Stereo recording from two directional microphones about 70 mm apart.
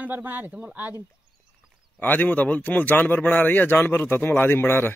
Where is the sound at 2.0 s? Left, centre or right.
Left.